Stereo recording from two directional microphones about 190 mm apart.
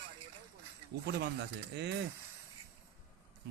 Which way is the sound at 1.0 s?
60° right (ahead or behind).